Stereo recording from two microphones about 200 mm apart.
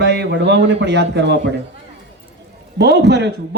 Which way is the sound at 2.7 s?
55° right (ahead or behind).